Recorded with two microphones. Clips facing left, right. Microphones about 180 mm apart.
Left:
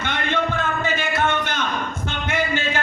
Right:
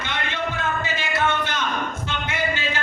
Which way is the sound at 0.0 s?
55° left (ahead or behind).